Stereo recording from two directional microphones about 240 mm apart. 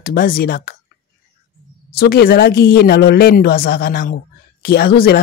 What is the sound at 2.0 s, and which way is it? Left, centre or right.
A man's voice, left.